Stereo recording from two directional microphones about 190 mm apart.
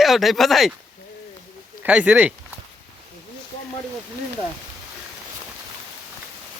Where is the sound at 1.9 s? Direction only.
5° right (ahead or behind).